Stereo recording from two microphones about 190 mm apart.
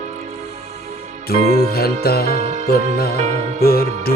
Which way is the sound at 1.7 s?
55° left (ahead or behind).